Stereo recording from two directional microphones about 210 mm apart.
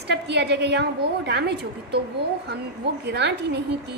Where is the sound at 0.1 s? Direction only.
55° right (ahead or behind).